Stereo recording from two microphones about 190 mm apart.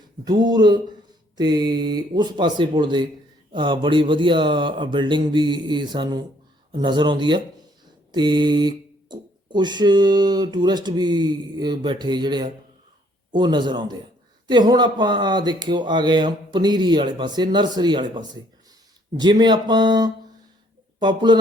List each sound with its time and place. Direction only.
0.3 s speech: 20° right (ahead or behind)